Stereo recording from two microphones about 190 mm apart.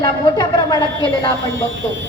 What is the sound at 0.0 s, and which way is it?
Speech, 20° left (ahead or behind).